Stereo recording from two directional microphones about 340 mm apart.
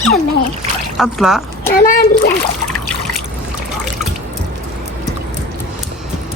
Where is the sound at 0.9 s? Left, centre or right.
Centre.